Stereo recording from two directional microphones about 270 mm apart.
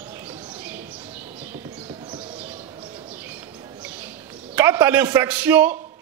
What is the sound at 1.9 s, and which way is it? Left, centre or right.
Bird, centre.